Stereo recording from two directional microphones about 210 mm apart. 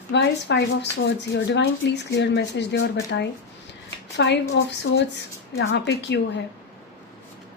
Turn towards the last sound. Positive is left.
turn(degrees=55)  # may be behind; listen again after turning